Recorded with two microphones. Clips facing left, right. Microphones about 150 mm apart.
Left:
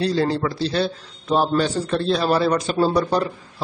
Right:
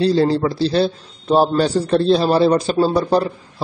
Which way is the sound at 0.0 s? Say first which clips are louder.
Right 5 dB; 30° right (ahead or behind).